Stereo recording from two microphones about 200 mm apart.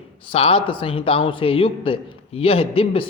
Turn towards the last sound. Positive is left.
turn(degrees=30)  # may be behind; listen again after turning